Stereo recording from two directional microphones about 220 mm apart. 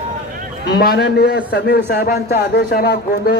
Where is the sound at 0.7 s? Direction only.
45° left (ahead or behind).